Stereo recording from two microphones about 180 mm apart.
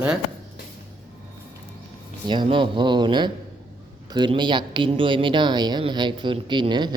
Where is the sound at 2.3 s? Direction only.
25° right (ahead or behind).